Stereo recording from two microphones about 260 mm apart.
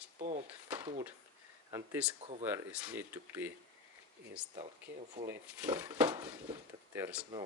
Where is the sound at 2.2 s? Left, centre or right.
Right.